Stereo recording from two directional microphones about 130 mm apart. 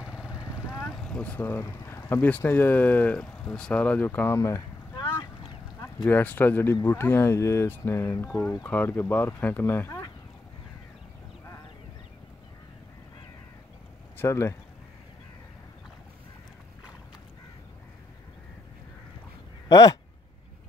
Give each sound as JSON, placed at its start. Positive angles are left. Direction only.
{"t": 0.0, "sound": "vehicle", "side_deg": -5}
{"t": 0.6, "sound": "speech", "side_deg": -5}
{"t": 4.4, "sound": "a sound", "side_deg": 25}
{"t": 6.0, "sound": "speech", "side_deg": 15}
{"t": 14.1, "sound": "speech", "side_deg": 20}
{"t": 19.7, "sound": "speech", "side_deg": 30}